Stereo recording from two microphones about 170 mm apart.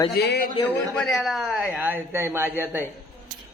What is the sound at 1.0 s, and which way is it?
Speech, centre (ahead or behind).